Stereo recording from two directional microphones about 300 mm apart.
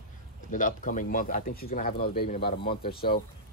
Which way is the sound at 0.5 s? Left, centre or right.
Left.